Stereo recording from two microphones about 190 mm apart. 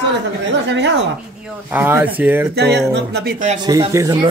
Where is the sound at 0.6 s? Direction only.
70° right (ahead or behind).